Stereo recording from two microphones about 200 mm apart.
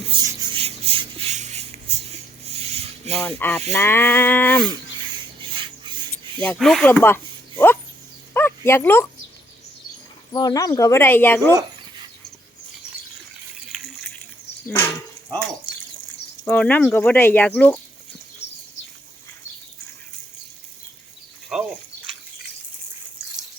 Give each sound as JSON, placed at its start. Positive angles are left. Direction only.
{"t": 0.0, "sound": "a sound", "side_deg": -25}
{"t": 3.2, "sound": "speech", "side_deg": 10}
{"t": 4.7, "sound": "filing", "side_deg": -25}
{"t": 6.4, "sound": "speech", "side_deg": 5}
{"t": 8.3, "sound": "dog", "side_deg": 10}
{"t": 10.3, "sound": "speech", "side_deg": 20}
{"t": 16.4, "sound": "speech", "side_deg": 10}